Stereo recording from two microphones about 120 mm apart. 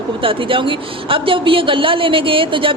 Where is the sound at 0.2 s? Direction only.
50° right (ahead or behind).